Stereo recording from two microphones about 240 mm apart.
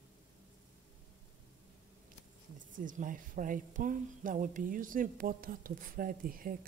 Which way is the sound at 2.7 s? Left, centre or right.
Right.